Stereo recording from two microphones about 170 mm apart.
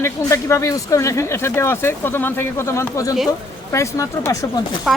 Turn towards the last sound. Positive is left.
turn(degrees=20)  # may be behind; listen again after turning